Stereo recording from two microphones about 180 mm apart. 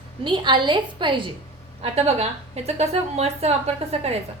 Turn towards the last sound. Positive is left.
turn(degrees=-35)  # may be behind; listen again after turning